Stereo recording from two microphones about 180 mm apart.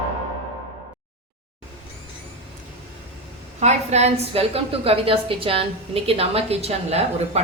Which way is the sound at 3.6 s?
40° right (ahead or behind).